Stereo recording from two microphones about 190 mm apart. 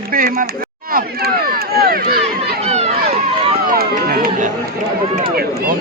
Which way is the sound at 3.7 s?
50° right (ahead or behind).